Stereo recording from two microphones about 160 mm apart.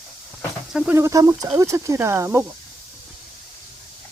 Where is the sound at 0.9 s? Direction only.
20° right (ahead or behind).